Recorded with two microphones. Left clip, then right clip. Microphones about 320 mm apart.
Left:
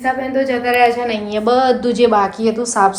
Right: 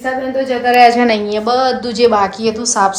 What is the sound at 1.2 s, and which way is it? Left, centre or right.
A woman's voice, centre.